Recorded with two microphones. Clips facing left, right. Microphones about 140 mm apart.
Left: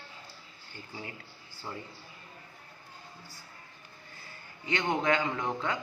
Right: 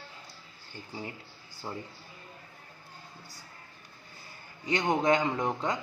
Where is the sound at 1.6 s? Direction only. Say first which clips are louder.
Right 2 dB; 20° right (ahead or behind).